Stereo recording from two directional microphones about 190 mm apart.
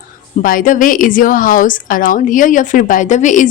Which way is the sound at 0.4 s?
45° left (ahead or behind).